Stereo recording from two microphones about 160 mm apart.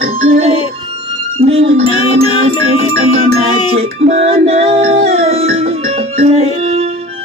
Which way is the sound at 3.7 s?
40° right (ahead or behind).